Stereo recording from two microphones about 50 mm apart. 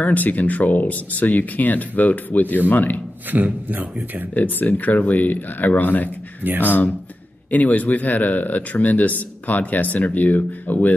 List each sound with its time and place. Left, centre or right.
0.0 s speech: left
3.3 s a man's voice: right
4.3 s speech: left